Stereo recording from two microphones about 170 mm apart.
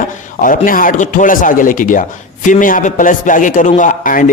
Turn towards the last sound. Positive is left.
turn(degrees=50)  # may be behind; listen again after turning